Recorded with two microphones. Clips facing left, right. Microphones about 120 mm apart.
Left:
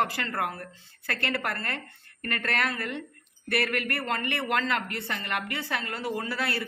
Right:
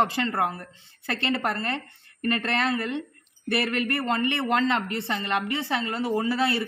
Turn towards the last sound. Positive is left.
turn(degrees=-25)  # may be behind; listen again after turning